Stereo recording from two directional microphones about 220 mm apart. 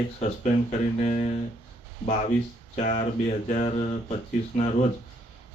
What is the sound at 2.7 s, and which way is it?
Speech, 30° left (ahead or behind).